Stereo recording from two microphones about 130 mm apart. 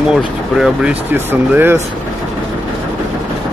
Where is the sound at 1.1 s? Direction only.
15° right (ahead or behind).